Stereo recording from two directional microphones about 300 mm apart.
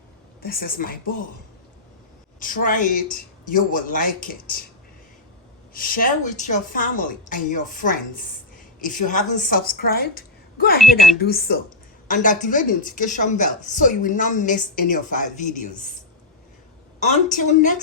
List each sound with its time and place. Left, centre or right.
0.4 s speech: left
2.4 s speech: left
5.7 s a woman's voice: left
17.0 s speech: left